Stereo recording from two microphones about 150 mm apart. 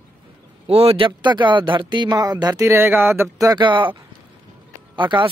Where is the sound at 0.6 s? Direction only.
40° right (ahead or behind).